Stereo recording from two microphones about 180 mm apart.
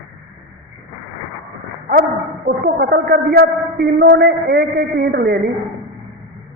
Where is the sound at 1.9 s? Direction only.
50° right (ahead or behind).